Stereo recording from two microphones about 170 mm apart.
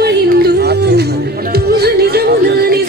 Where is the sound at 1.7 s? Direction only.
70° right (ahead or behind).